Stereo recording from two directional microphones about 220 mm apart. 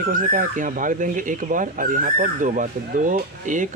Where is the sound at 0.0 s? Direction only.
35° right (ahead or behind).